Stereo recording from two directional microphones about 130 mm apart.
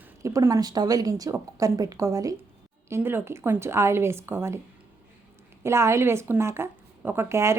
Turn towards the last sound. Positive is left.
turn(degrees=-20)  # may be behind; listen again after turning